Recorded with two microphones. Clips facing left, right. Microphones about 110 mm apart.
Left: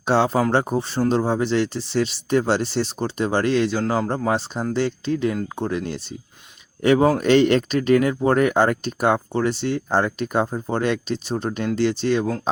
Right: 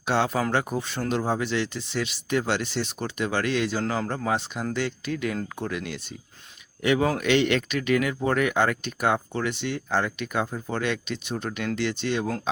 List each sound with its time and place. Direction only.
0.0 s speech: 35° left (ahead or behind)